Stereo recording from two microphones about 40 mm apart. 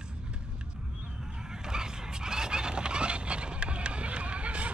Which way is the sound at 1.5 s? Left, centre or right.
Centre.